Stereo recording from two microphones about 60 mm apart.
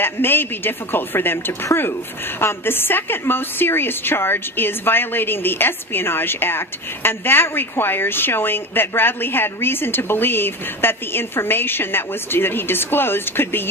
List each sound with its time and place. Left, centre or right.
0.0 s a woman's voice: left